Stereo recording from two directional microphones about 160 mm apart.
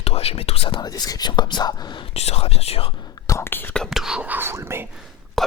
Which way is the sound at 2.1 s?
40° left (ahead or behind).